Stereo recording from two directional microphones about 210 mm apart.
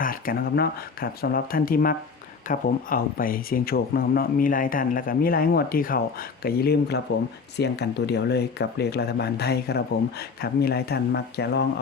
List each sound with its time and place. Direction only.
0.0 s speech: 45° left (ahead or behind)